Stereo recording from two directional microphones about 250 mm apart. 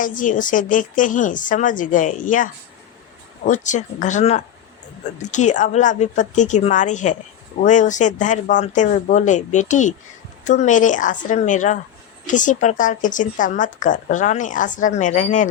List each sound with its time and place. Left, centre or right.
0.0 s speech: left